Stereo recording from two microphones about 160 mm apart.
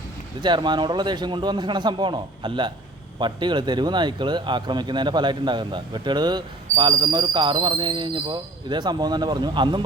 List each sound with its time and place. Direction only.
0.4 s speech: 30° right (ahead or behind)